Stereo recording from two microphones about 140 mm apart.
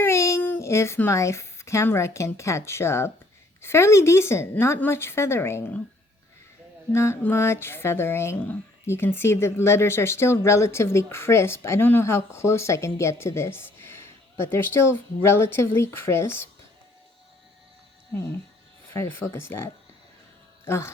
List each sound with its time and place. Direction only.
0.0 s speech: 20° left (ahead or behind)
6.9 s speech: 20° left (ahead or behind)
18.1 s speech: 15° left (ahead or behind)